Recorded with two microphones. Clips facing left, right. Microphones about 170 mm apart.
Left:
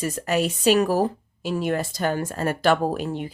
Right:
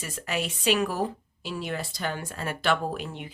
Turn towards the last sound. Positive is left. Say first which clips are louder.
# left 7 dB
turn(degrees=40)  # may be behind; listen again after turning